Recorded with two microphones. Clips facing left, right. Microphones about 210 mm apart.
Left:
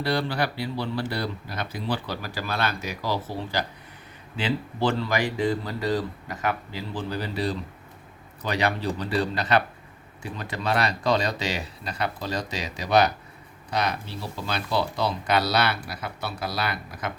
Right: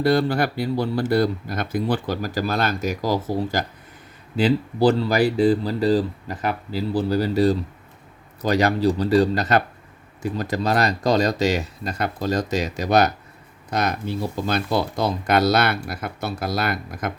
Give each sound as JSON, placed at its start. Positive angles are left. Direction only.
{"t": 0.0, "sound": "speech", "side_deg": -45}